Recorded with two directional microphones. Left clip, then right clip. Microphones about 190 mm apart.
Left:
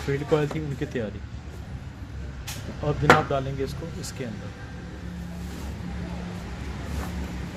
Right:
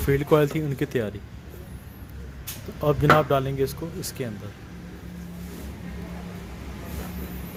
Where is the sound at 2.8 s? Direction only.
40° right (ahead or behind).